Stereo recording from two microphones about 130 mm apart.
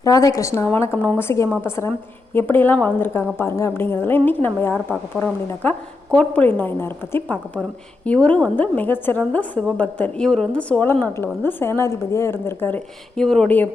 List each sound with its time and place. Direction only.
0.0 s a woman's voice: 25° left (ahead or behind)
13.1 s speech: 5° left (ahead or behind)